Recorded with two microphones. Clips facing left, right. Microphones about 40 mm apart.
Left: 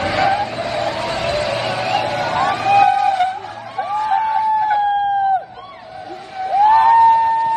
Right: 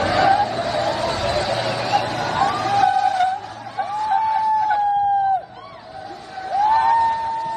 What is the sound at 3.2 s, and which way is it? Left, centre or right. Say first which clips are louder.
Vehicle: even; left.